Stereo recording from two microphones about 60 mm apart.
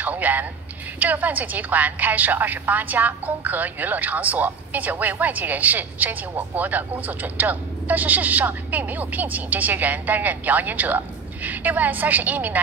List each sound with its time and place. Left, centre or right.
0.0 s a woman's voice: right